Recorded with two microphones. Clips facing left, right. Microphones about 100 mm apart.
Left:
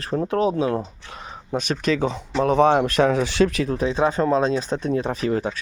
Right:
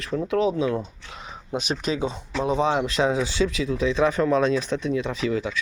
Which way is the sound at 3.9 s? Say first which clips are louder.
Even; 30° left (ahead or behind).